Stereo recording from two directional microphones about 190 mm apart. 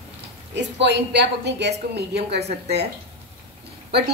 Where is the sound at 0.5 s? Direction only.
65° right (ahead or behind).